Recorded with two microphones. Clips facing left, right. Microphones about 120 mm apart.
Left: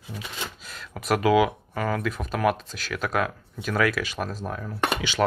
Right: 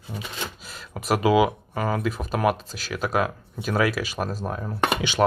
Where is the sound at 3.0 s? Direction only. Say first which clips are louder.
Right 2 dB; 20° right (ahead or behind).